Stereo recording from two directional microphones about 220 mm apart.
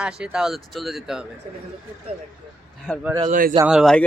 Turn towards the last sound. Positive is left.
turn(degrees=0)  # may be behind; listen again after turning